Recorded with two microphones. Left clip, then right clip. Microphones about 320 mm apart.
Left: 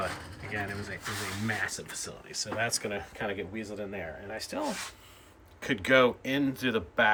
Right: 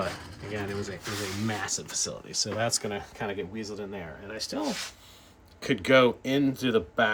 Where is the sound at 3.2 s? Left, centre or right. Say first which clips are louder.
Right 2 dB; centre.